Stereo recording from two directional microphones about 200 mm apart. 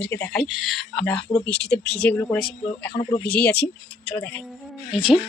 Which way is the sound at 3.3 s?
55° left (ahead or behind).